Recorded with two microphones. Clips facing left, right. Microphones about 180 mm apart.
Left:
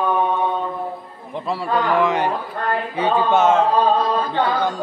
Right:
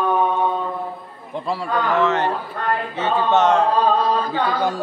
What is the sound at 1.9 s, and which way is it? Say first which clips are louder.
Speech: right 1 dB; 15° left (ahead or behind).